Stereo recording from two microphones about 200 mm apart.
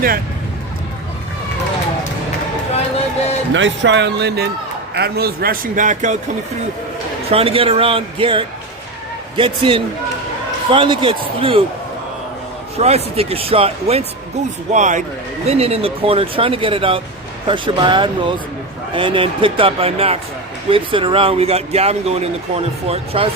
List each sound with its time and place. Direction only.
3.5 s a man's voice: 65° right (ahead or behind); by 6.1 s 40° right (ahead or behind)
7.3 s speech: 30° right (ahead or behind)
12.7 s a man's voice: 30° right (ahead or behind)